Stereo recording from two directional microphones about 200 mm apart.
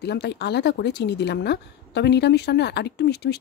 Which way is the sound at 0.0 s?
55° left (ahead or behind).